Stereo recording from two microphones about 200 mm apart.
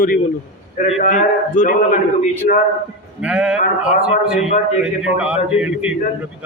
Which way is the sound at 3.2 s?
5° right (ahead or behind).